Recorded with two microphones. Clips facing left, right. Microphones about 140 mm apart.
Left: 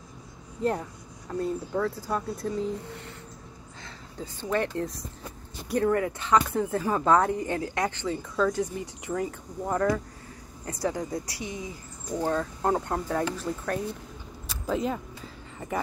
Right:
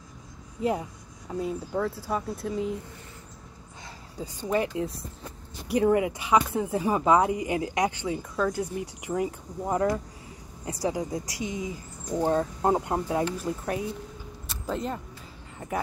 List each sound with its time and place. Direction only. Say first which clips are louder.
0.6 s speech: even; 5° right (ahead or behind)
4.2 s speech: right 1 dB; 10° right (ahead or behind)
14.5 s a sound: left 3 dB; centre (ahead or behind)